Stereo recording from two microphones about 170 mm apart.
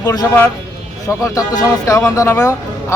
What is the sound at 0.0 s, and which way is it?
A man's voice, 20° left (ahead or behind).